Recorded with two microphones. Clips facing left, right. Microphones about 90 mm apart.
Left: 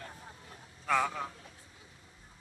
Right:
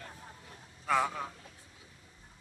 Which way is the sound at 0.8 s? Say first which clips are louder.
Even; 5° right (ahead or behind).